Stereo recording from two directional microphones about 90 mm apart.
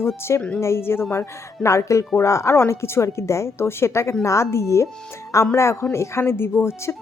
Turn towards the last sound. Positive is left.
turn(degrees=25)  # may be behind; listen again after turning